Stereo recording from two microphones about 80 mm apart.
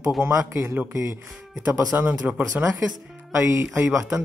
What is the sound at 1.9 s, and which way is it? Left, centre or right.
Speech, right.